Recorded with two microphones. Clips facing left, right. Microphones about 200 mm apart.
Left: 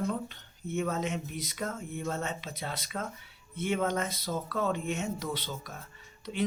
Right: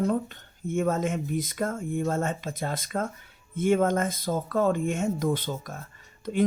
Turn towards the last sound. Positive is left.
turn(degrees=-50)  # may be behind; listen again after turning